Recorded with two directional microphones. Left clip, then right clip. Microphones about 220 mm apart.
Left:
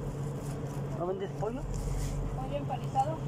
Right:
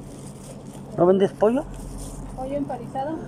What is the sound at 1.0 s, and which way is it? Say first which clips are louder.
Speech: right 17 dB; 50° right (ahead or behind).